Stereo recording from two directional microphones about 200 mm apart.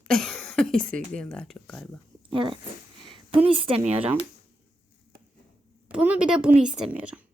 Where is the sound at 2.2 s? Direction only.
25° right (ahead or behind).